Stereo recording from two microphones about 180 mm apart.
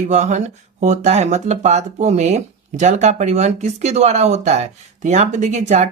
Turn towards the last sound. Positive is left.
turn(degrees=-40)  # may be behind; listen again after turning